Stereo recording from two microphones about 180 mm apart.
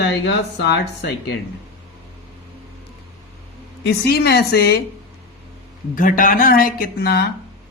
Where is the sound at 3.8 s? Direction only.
60° left (ahead or behind).